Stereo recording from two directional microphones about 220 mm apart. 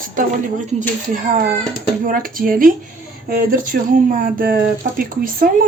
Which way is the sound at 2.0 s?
40° right (ahead or behind).